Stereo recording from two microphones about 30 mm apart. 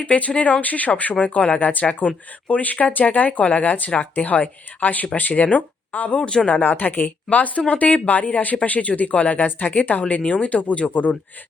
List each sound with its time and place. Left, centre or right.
0.0 s speech: left
0.6 s speech: left
1.5 s speech: left
1.8 s speech: left
5.3 s speech: left
6.1 s speech: left
6.6 s speech: left
10.1 s speech: left